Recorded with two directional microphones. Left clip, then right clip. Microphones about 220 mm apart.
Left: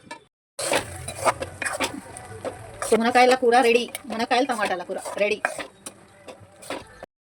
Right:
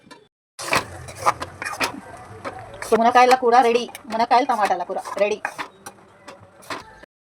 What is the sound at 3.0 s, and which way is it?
Speech, 15° left (ahead or behind).